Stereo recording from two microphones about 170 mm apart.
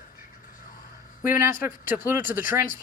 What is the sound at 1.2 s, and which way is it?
Speech, 15° right (ahead or behind).